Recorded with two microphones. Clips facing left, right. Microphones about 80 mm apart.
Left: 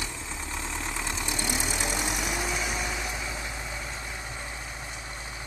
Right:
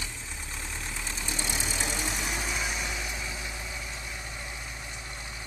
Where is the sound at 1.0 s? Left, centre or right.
Left.